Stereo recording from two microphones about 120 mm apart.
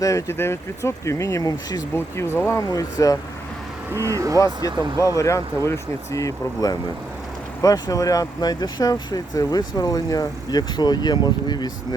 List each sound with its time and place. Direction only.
0.0 s speech: 25° left (ahead or behind)
2.0 s speech: 20° left (ahead or behind)
3.9 s speech: 25° right (ahead or behind)
4.6 s speech: 30° left (ahead or behind)